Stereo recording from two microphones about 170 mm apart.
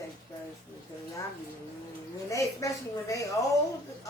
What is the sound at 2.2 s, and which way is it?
A woman's voice, 20° left (ahead or behind).